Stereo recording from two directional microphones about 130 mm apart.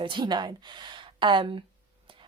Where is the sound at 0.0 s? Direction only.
40° right (ahead or behind).